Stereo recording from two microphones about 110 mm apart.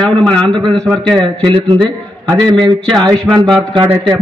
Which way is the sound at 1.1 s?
50° right (ahead or behind).